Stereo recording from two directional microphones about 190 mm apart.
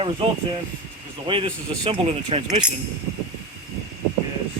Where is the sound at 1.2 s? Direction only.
25° right (ahead or behind).